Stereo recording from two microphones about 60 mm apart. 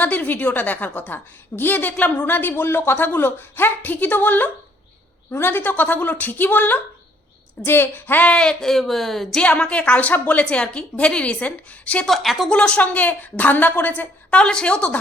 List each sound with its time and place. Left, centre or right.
0.0 s a woman's voice: left
8.2 s speech: centre
9.4 s a woman's voice: left
12.0 s speech: centre
12.5 s a woman's voice: centre
14.3 s speech: centre